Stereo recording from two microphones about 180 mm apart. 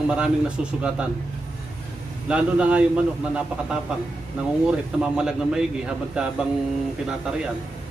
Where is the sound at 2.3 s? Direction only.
5° right (ahead or behind).